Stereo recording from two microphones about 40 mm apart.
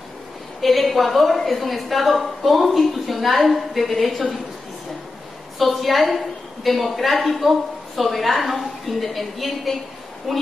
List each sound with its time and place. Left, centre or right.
0.6 s a woman's voice: centre
5.6 s a woman's voice: centre